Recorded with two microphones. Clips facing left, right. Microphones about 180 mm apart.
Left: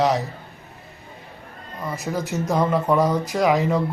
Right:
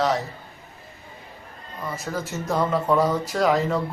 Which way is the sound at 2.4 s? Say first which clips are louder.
Left 2 dB; 15° left (ahead or behind).